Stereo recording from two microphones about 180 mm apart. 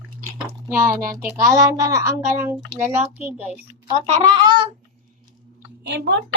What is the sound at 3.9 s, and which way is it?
Speech, 25° right (ahead or behind).